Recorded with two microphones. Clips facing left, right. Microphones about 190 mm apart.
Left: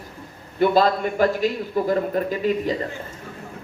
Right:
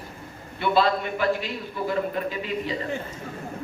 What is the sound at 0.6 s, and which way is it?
A man's voice, 40° left (ahead or behind).